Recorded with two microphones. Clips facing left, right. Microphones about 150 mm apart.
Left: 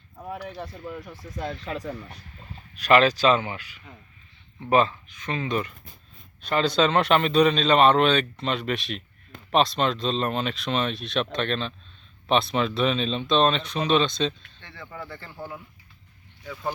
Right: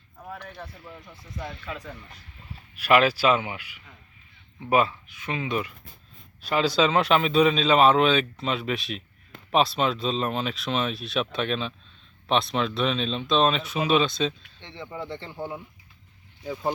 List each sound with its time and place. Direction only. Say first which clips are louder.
1.6 s speech: left 5 dB; 40° left (ahead or behind)
2.7 s a man's voice: left 1 dB; 10° right (ahead or behind)
14.6 s speech: right 4 dB; 20° right (ahead or behind)